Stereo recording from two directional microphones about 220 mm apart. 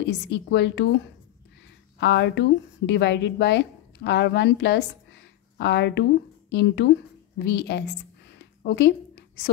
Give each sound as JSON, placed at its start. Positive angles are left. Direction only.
{"t": 0.0, "sound": "a woman's voice", "side_deg": 50}
{"t": 2.0, "sound": "a woman's voice", "side_deg": 50}